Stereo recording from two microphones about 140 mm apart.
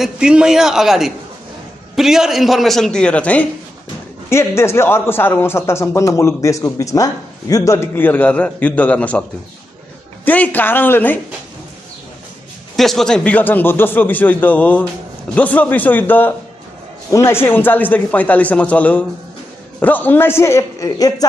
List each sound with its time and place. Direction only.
0.0 s a man's voice: 5° right (ahead or behind); by 9.2 s 10° left (ahead or behind)
10.2 s a man's voice: 10° left (ahead or behind)
12.7 s a man's voice: centre (ahead or behind); by 21.3 s 25° left (ahead or behind)